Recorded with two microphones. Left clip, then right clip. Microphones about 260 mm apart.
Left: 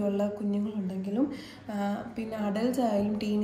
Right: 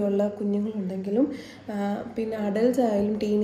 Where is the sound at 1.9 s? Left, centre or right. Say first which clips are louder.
Right 6 dB; centre.